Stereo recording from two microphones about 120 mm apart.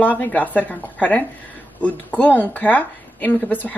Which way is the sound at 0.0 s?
15° left (ahead or behind).